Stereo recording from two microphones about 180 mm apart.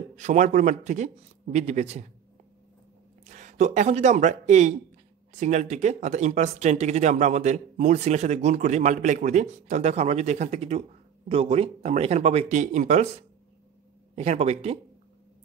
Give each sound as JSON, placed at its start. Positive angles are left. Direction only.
{"t": 0.1, "sound": "speech", "side_deg": -40}
{"t": 3.3, "sound": "speech", "side_deg": -40}
{"t": 14.1, "sound": "speech", "side_deg": -35}